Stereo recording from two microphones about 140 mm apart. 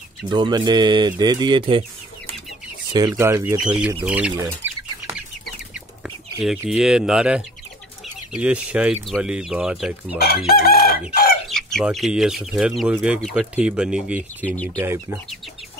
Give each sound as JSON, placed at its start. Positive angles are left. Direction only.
{"t": 0.3, "sound": "speech", "side_deg": -30}
{"t": 3.1, "sound": "speech", "side_deg": -20}
{"t": 4.6, "sound": "bird", "side_deg": -15}
{"t": 6.0, "sound": "chicken", "side_deg": -5}
{"t": 6.7, "sound": "speech", "side_deg": -5}
{"t": 10.1, "sound": "chicken", "side_deg": 90}
{"t": 11.4, "sound": "chicken", "side_deg": 5}
{"t": 11.8, "sound": "speech", "side_deg": -5}
{"t": 14.4, "sound": "speech", "side_deg": 10}
{"t": 14.8, "sound": "speech", "side_deg": -20}